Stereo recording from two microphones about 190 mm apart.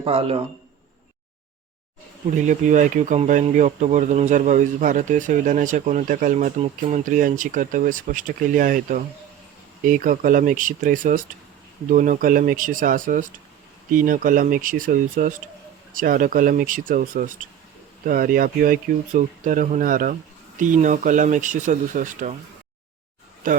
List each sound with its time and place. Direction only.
0.0 s speech: 30° right (ahead or behind)
2.3 s speech: 40° right (ahead or behind)
23.4 s speech: 45° right (ahead or behind)